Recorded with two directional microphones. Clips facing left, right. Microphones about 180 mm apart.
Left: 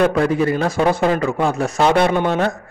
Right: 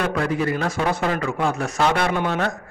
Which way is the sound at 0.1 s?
30° left (ahead or behind).